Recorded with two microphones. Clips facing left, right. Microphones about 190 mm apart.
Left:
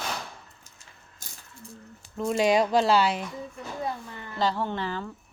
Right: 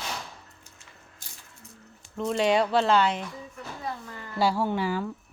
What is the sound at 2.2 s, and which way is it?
Speech, 10° left (ahead or behind).